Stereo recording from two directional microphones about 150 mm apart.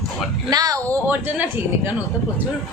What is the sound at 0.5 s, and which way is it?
Speech, 25° right (ahead or behind).